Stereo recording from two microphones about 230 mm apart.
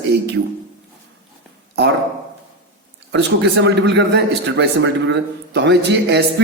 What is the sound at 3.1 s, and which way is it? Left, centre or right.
Speech, right.